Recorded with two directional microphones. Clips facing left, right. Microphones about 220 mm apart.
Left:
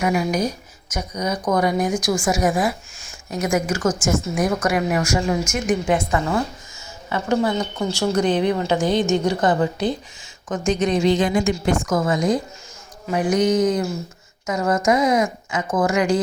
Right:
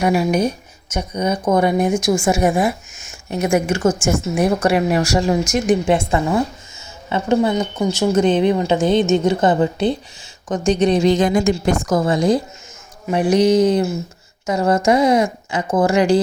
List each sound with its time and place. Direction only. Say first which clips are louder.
0.0 s a woman's voice: right 4 dB; 30° right (ahead or behind)